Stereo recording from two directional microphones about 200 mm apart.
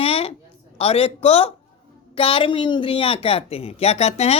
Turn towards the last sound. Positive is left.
turn(degrees=30)  # may be behind; listen again after turning